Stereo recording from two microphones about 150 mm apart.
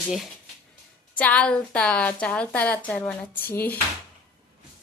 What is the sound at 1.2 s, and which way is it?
A woman's voice, 10° left (ahead or behind).